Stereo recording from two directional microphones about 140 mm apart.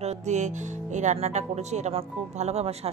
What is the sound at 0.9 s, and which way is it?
Speech, 55° right (ahead or behind).